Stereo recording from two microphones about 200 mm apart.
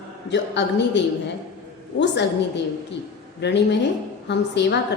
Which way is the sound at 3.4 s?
60° left (ahead or behind).